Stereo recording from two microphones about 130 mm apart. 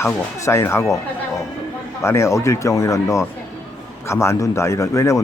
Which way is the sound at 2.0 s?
20° left (ahead or behind).